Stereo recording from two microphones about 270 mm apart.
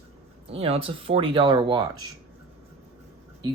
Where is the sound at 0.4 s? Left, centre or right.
Right.